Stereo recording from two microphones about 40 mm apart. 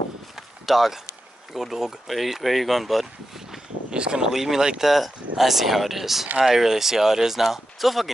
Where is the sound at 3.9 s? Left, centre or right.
Right.